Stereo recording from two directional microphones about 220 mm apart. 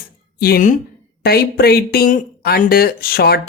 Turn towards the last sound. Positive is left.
turn(degrees=45)  # may be behind; listen again after turning